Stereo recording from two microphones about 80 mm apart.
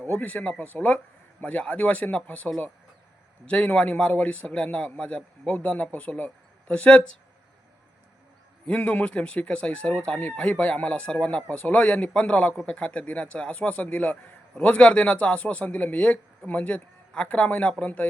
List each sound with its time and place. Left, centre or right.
0.2 s a man's voice: centre
8.6 s a man's voice: centre